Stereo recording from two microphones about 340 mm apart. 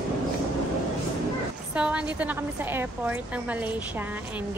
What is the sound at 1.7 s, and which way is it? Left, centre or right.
A woman's voice, centre.